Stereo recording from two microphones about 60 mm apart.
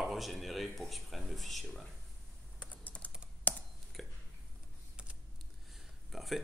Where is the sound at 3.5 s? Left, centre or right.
Left.